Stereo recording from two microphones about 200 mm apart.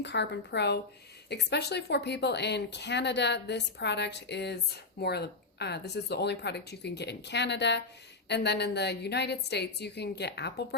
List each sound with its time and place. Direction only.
0.0 s speech: 60° left (ahead or behind)